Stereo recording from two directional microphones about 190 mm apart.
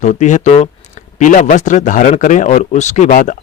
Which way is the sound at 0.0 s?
40° left (ahead or behind).